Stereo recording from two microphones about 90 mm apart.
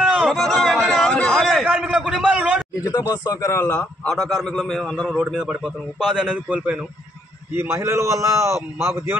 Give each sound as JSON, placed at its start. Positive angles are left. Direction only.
{"t": 0.0, "sound": "a sound", "side_deg": -15}
{"t": 0.3, "sound": "a sound", "side_deg": 0}
{"t": 1.8, "sound": "a man's voice", "side_deg": -10}
{"t": 2.7, "sound": "speech", "side_deg": 40}
{"t": 4.4, "sound": "a man's voice", "side_deg": 5}
{"t": 5.1, "sound": "a man's voice", "side_deg": -10}
{"t": 7.5, "sound": "a man's voice", "side_deg": -30}